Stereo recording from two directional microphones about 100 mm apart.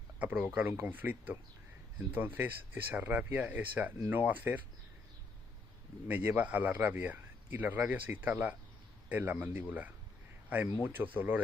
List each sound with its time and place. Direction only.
0.2 s speech: 15° right (ahead or behind)
6.1 s speech: 15° right (ahead or behind)